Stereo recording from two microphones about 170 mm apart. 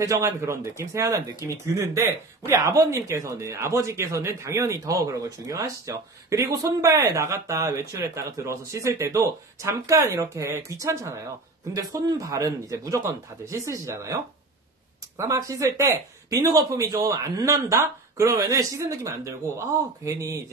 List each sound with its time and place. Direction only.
0.0 s speech: 20° right (ahead or behind)